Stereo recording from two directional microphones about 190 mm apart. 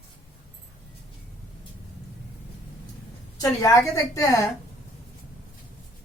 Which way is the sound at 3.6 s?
20° left (ahead or behind).